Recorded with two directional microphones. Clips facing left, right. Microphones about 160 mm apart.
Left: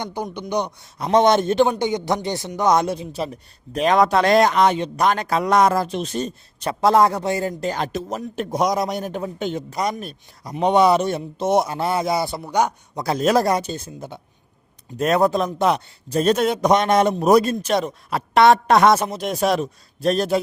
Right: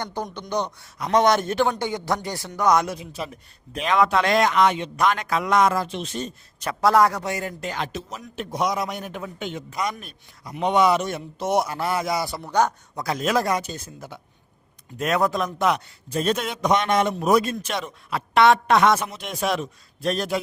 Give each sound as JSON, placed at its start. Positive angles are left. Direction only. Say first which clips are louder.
{"t": 0.0, "sound": "speech", "louder": "left 3 dB", "side_deg": 15}
{"t": 0.9, "sound": "a man's voice", "louder": "left 3 dB", "side_deg": 25}
{"t": 12.4, "sound": "speech", "louder": "left 1 dB", "side_deg": 10}
{"t": 13.0, "sound": "speech", "louder": "left 5 dB", "side_deg": 35}